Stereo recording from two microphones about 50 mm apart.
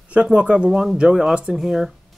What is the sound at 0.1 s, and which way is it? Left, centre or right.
Speech, right.